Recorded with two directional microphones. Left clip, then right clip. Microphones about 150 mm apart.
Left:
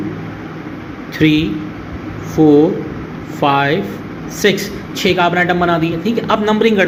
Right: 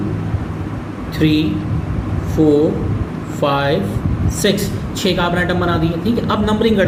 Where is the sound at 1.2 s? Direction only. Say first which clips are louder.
Left 3 dB; 30° left (ahead or behind).